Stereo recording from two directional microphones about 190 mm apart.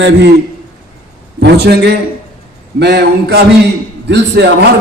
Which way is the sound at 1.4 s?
60° right (ahead or behind).